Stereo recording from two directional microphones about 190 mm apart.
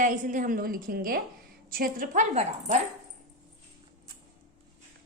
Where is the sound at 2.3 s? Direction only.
35° right (ahead or behind).